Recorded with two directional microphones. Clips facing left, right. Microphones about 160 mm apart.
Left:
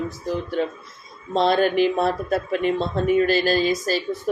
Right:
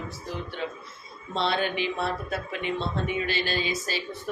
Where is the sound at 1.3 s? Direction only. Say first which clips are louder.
Left 8 dB; 45° left (ahead or behind).